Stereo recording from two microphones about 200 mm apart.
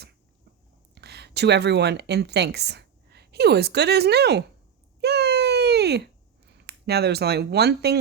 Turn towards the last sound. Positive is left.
turn(degrees=-55)  # may be behind; listen again after turning